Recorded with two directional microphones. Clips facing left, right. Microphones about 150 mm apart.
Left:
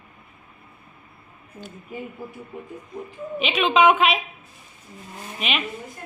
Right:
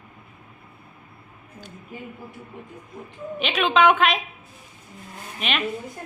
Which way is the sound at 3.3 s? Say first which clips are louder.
Left 1 dB; centre (ahead or behind).